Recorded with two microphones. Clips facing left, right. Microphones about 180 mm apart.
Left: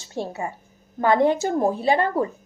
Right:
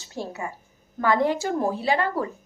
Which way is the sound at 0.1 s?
25° left (ahead or behind).